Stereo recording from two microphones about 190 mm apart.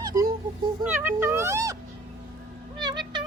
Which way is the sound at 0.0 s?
20° right (ahead or behind).